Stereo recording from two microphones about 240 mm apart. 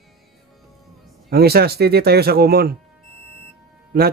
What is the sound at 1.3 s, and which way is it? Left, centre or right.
Speech, right.